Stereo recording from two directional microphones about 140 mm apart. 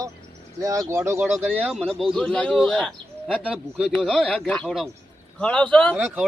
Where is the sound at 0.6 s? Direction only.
25° right (ahead or behind).